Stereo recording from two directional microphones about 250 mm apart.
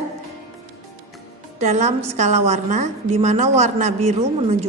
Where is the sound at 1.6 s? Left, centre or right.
Right.